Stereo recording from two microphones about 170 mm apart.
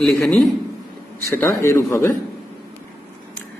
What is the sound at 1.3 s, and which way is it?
Speech, 15° left (ahead or behind).